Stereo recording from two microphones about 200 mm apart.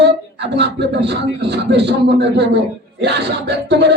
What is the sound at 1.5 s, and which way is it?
A man's voice, 60° right (ahead or behind).